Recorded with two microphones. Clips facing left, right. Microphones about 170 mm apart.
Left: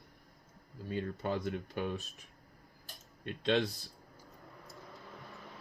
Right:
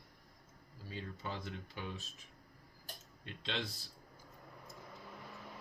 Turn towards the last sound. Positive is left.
turn(degrees=55)  # may be behind; listen again after turning